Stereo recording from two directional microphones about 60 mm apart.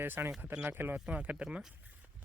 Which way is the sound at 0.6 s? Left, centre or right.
Right.